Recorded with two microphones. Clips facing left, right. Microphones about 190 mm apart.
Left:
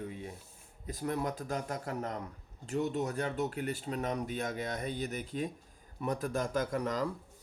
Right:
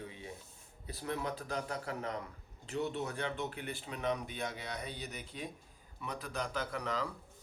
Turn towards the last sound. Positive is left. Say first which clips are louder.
# left 5 dB
turn(degrees=45)  # may be behind; listen again after turning